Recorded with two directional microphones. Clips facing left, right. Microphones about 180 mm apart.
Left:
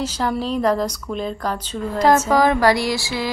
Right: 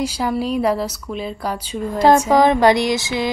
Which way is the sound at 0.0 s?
10° right (ahead or behind).